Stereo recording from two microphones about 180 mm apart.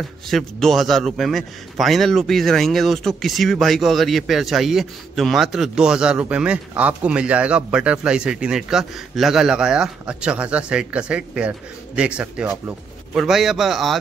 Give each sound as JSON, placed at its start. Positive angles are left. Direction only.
{"t": 0.3, "sound": "a man's voice", "side_deg": 0}